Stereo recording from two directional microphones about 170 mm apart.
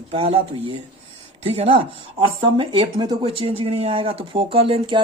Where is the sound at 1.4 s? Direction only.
40° right (ahead or behind).